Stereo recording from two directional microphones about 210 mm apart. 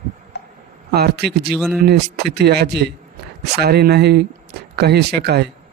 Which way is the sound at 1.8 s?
50° right (ahead or behind).